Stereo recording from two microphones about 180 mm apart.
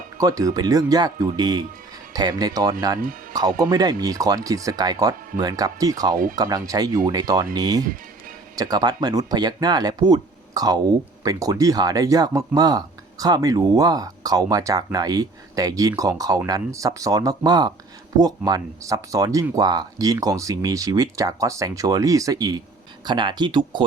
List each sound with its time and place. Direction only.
0.2 s speech: 20° right (ahead or behind)